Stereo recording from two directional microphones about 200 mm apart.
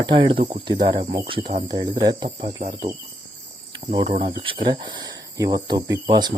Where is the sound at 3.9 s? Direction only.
30° right (ahead or behind).